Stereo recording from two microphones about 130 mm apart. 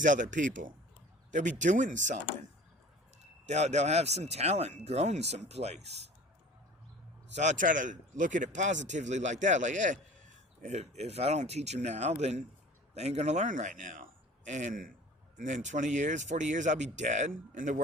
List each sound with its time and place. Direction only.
0.0 s speech: 80° right
3.4 s speech: 60° right (ahead or behind)
7.3 s speech: 75° right (ahead or behind)
10.6 s a man's voice: 55° right (ahead or behind); by 14.9 s 90° right
15.4 s speech: 70° right (ahead or behind); by 17.8 s 85° right